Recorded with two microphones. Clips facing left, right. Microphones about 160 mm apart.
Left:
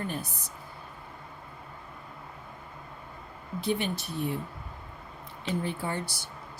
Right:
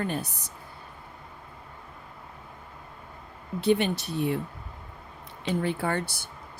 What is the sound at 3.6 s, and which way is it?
Speech, 70° right (ahead or behind).